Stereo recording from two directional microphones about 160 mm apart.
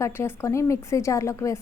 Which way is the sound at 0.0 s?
15° left (ahead or behind).